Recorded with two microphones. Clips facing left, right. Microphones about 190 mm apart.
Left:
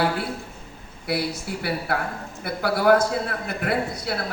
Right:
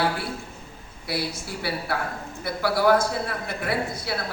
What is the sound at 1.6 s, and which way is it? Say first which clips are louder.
A man's voice: left 1 dB; 55° left (ahead or behind).